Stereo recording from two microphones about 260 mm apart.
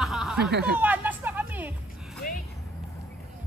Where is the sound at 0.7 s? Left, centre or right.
Centre.